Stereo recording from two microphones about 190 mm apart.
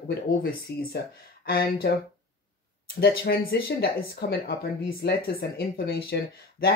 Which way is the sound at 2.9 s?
55° left (ahead or behind).